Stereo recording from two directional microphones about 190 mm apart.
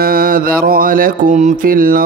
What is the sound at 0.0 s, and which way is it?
Mantra, 50° right (ahead or behind).